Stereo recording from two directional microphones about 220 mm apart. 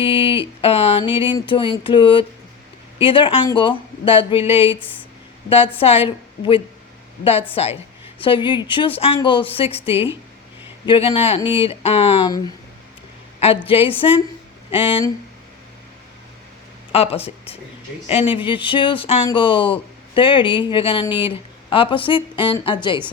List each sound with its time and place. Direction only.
0.0 s speech: 25° left (ahead or behind)
13.7 s speech: 25° left (ahead or behind)
16.9 s speech: 25° left (ahead or behind)